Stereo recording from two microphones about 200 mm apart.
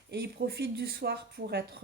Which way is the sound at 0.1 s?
55° right (ahead or behind).